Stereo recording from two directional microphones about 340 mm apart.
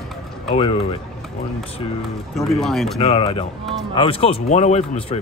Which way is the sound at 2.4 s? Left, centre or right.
Centre.